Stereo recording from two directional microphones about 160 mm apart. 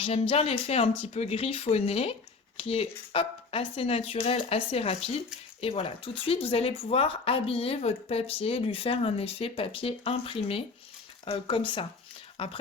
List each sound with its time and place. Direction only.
0.0 s speech: 35° left (ahead or behind)